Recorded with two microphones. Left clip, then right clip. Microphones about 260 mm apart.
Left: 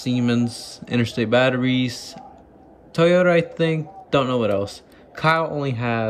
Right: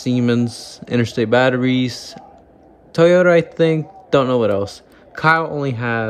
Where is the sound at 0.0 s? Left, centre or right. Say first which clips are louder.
Right 4 dB; centre.